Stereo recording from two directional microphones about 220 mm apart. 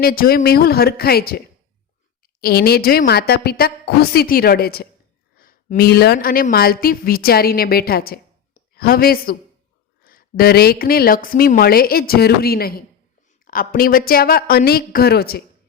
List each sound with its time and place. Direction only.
0.0 s speech: 40° left (ahead or behind)
2.4 s a woman's voice: 45° left (ahead or behind)